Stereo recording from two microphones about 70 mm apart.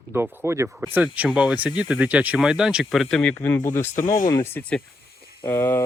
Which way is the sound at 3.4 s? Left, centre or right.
Left.